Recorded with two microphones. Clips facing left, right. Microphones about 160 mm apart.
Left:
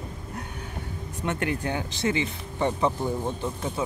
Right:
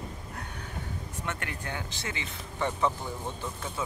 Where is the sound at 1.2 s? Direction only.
20° left (ahead or behind).